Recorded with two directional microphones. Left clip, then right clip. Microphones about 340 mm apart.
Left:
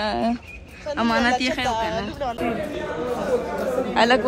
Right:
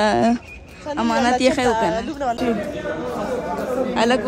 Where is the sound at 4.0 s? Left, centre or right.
Centre.